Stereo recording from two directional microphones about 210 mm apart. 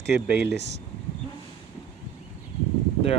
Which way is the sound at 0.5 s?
55° right (ahead or behind).